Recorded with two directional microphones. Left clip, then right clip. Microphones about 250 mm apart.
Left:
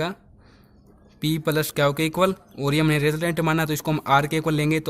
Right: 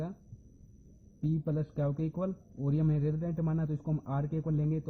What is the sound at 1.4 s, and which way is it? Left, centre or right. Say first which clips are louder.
Speech: left 17 dB; left.